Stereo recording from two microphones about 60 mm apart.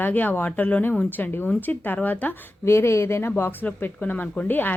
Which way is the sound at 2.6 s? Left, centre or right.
Left.